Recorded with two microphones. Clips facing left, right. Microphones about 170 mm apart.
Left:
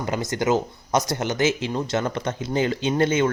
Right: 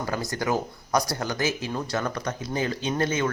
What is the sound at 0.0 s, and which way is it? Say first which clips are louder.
Speech: left 4 dB; 20° left (ahead or behind).